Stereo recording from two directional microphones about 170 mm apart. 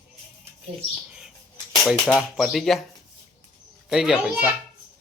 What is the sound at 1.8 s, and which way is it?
Speech, 5° left (ahead or behind).